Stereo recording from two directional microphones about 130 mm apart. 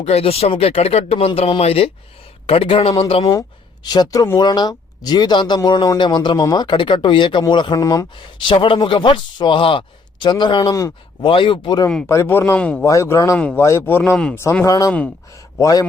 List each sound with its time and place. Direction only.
0.0 s speech: 50° left (ahead or behind)
3.8 s speech: 30° left (ahead or behind)
8.4 s speech: 40° left (ahead or behind)
11.3 s speech: 40° left (ahead or behind)
12.0 s speech: 20° left (ahead or behind)
12.8 s speech: 25° left (ahead or behind)